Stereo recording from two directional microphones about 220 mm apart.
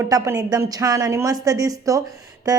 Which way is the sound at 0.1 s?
15° right (ahead or behind).